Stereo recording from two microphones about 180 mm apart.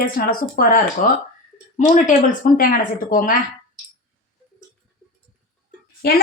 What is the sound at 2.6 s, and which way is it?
Speech, 50° left (ahead or behind).